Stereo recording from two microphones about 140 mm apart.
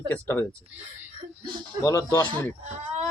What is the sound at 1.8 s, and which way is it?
Speech, 25° left (ahead or behind).